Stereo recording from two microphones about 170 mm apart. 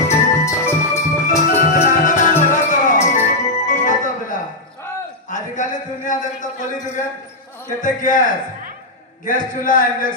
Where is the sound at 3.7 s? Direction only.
50° left (ahead or behind).